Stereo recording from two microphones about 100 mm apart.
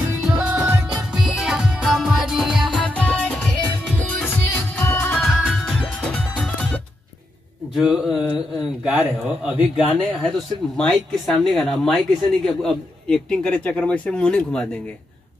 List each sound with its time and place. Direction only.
0.2 s music: 10° right (ahead or behind)
2.9 s music: 15° left (ahead or behind)
4.2 s music: 20° left (ahead or behind)
5.2 s music: centre (ahead or behind)
7.7 s a man's voice: 5° right (ahead or behind)
10.2 s speech: 5° left (ahead or behind)